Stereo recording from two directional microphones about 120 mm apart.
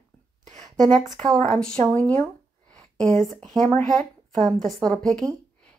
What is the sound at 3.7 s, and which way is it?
Speech, 90° right.